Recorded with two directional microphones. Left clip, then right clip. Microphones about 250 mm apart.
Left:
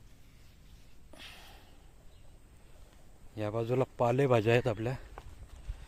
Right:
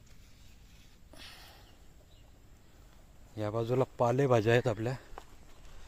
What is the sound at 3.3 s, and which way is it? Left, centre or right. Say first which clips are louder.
Speech: even; centre.